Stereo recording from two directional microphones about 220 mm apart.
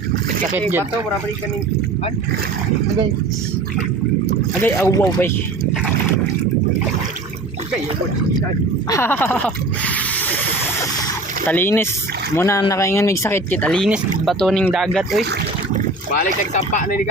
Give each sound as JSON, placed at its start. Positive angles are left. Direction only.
{"t": 4.6, "sound": "speech", "side_deg": 10}
{"t": 8.9, "sound": "speech", "side_deg": 10}
{"t": 11.4, "sound": "speech", "side_deg": 10}
{"t": 16.7, "sound": "speech", "side_deg": 40}